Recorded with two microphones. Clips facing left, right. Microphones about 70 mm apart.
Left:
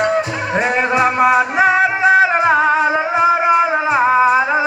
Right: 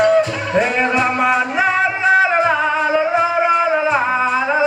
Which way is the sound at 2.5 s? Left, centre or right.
Left.